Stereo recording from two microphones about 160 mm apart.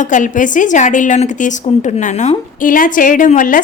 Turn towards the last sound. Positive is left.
turn(degrees=55)  # may be behind; listen again after turning